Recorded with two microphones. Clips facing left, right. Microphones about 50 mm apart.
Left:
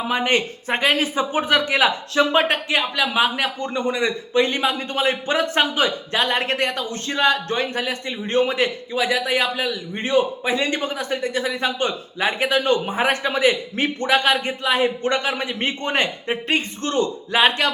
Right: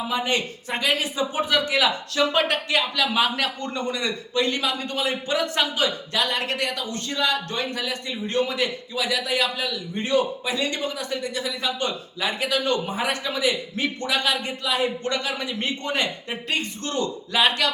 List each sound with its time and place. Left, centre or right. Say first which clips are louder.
0.1 s speech: left 6 dB; left